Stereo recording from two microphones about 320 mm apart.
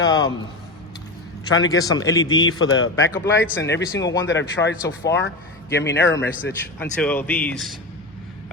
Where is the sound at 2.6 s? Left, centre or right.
Left.